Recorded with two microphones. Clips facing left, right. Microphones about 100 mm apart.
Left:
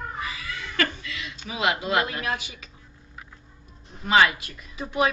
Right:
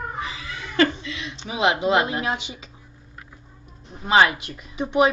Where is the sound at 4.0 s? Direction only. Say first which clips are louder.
Right 2 dB; 25° right (ahead or behind).